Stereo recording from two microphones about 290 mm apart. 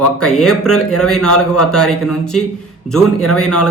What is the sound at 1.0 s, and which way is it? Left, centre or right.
Speech, centre.